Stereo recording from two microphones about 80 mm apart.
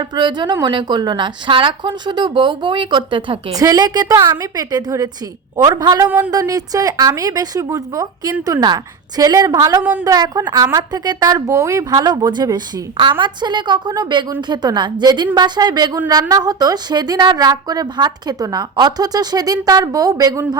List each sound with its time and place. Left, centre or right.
0.2 s a woman's voice: right
3.5 s a woman's voice: right
6.1 s a sound: right
6.4 s a woman's voice: right